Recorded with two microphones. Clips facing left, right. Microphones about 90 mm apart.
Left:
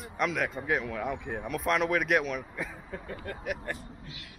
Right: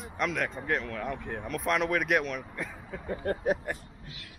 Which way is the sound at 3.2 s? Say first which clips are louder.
Right 9 dB; 35° right (ahead or behind).